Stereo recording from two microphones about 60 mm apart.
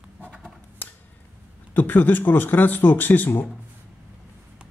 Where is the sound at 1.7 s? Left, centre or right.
Left.